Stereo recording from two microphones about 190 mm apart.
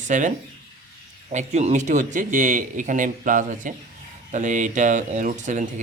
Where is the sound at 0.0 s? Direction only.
40° right (ahead or behind).